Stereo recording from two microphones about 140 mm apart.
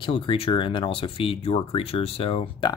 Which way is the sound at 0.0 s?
40° left (ahead or behind).